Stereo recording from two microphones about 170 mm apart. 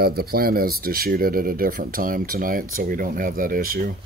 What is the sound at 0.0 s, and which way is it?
Speech, 65° right (ahead or behind).